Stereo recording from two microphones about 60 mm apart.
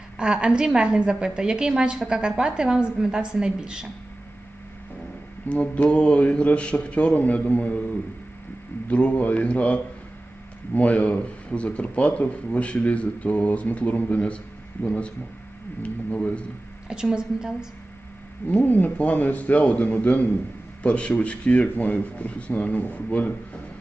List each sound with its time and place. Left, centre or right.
0.2 s a woman's voice: centre
5.5 s speech: left
8.9 s speech: left
16.9 s a woman's voice: centre
18.4 s speech: left